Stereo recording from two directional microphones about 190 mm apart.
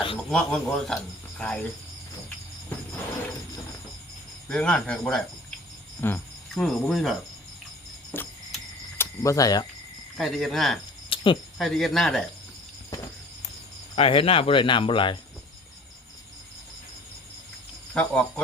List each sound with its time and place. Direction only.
0.3 s speech: 5° left (ahead or behind)
4.4 s speech: 5° left (ahead or behind)
6.0 s cricket: 10° left (ahead or behind)
8.1 s cricket: 10° left (ahead or behind)
9.0 s speech: 15° left (ahead or behind)
10.2 s speech: centre (ahead or behind)
11.1 s cricket: 25° left (ahead or behind)
11.5 s speech: centre (ahead or behind)
13.9 s speech: 30° left (ahead or behind)
17.9 s speech: 5° left (ahead or behind)